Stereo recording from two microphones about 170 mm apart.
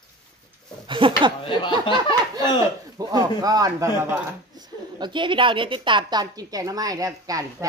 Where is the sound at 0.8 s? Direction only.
30° right (ahead or behind).